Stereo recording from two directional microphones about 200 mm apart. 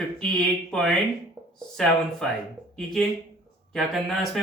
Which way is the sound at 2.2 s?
Centre (ahead or behind).